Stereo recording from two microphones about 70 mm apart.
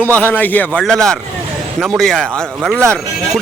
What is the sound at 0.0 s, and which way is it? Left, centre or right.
Speech, left.